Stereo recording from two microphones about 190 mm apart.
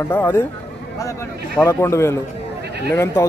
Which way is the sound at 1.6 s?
15° left (ahead or behind).